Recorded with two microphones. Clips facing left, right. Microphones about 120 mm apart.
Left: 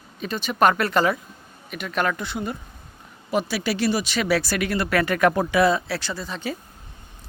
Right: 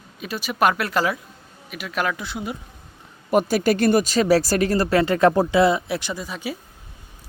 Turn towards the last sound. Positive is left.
turn(degrees=-10)  # may be behind; listen again after turning